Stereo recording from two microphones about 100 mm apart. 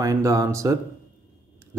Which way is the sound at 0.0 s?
35° right (ahead or behind).